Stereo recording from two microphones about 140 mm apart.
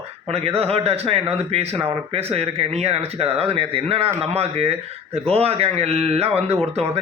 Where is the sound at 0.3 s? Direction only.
45° right (ahead or behind).